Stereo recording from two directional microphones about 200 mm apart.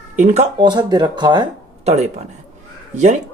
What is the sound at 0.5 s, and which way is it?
Speech, 20° right (ahead or behind).